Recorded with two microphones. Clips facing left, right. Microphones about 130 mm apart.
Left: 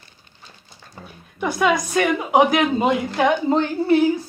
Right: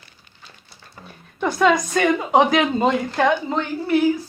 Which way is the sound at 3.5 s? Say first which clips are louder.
Left 4 dB; 30° left (ahead or behind).